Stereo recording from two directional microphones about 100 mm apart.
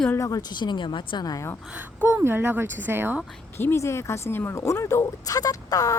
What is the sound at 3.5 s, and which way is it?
Speech, 25° left (ahead or behind).